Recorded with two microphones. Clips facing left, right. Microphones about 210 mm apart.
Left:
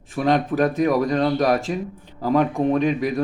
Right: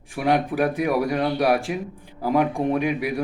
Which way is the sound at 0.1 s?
10° right (ahead or behind).